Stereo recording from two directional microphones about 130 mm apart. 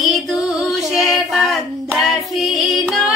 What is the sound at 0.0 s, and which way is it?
Female singing, centre (ahead or behind).